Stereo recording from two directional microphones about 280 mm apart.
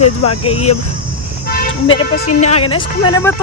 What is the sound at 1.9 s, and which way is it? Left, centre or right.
Speech, centre.